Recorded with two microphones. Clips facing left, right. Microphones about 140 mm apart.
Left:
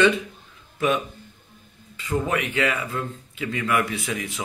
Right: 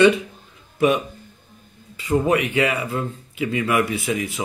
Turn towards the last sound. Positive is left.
turn(degrees=-5)  # may be behind; listen again after turning